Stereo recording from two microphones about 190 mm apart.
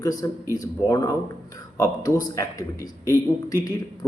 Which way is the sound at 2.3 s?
15° left (ahead or behind).